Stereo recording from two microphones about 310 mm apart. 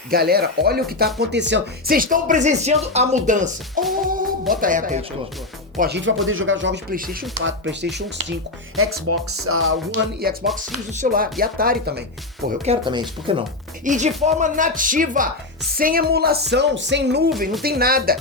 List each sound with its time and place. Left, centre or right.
0.1 s speech: right
12.5 s speech: centre